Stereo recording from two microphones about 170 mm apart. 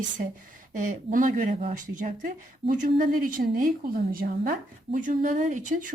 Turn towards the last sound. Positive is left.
turn(degrees=-50)  # may be behind; listen again after turning